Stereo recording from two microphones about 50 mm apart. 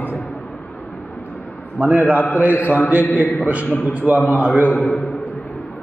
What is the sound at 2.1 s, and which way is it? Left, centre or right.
Mantra, left.